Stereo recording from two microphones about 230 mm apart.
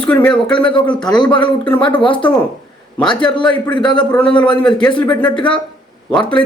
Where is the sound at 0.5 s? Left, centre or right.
Left.